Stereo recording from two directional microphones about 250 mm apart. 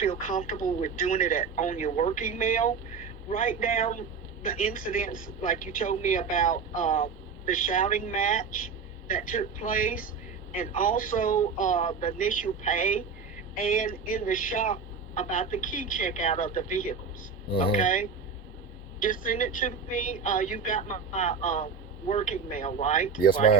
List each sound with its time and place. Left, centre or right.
0.0 s a woman's voice: left